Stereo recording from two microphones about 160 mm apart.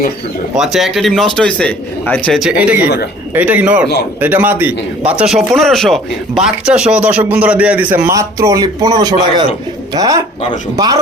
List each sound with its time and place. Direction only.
0.5 s a man's voice: centre (ahead or behind)
2.4 s a man's voice: 5° right (ahead or behind); by 11.0 s 25° right (ahead or behind)